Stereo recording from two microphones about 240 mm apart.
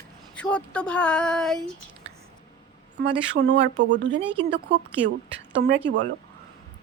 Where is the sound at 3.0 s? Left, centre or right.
Right.